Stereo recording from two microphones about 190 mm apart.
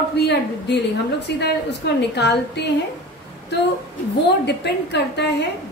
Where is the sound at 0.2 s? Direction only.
60° left (ahead or behind).